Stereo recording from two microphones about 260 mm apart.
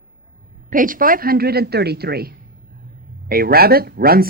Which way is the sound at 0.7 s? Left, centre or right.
Right.